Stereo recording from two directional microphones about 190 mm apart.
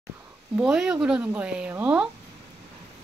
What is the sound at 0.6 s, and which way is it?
Speech, 5° right (ahead or behind).